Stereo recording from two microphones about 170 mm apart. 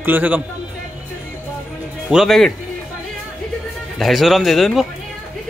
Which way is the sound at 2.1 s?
Centre (ahead or behind).